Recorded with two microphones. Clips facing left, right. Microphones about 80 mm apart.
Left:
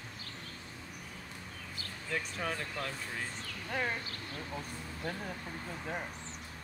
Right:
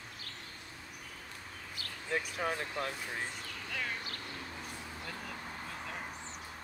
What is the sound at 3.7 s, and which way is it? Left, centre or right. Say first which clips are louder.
Speech: left 5 dB; left.